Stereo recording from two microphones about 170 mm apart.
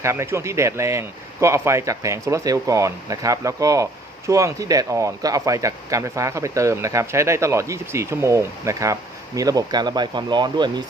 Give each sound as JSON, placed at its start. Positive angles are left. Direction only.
{"t": 0.0, "sound": "speech", "side_deg": -15}